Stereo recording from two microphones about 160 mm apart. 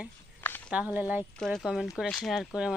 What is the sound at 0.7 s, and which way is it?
Speech, 10° right (ahead or behind).